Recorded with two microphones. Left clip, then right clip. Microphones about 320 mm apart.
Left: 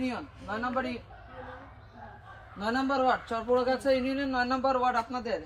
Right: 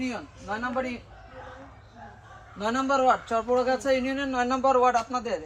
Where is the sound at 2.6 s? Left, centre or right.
Centre.